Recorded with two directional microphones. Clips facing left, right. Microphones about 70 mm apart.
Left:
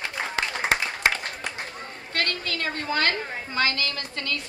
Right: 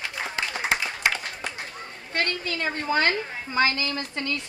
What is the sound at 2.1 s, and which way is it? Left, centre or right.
A woman's voice, centre.